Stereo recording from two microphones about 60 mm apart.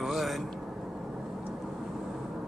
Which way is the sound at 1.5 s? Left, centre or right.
Centre.